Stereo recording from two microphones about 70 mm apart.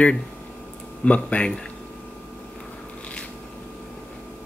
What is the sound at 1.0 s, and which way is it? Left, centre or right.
Speech, centre.